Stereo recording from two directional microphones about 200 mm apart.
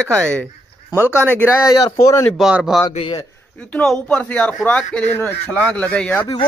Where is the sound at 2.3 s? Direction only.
5° right (ahead or behind).